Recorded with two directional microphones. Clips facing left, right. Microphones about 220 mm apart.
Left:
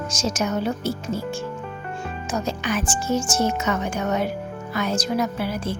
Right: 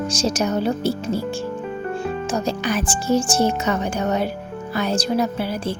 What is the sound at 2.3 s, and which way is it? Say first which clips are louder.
Speech: right 1 dB; 35° right (ahead or behind).